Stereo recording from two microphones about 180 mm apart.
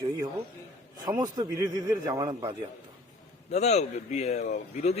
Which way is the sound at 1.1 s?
20° right (ahead or behind).